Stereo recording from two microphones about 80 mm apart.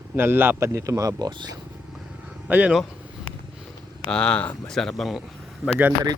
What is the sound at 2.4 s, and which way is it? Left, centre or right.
Speech, centre.